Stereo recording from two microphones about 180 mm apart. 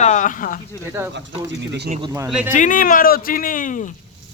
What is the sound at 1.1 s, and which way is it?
Speech, 80° right.